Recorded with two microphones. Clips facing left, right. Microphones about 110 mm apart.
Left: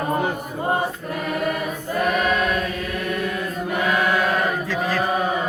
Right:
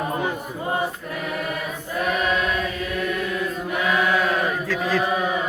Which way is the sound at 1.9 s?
50° left (ahead or behind).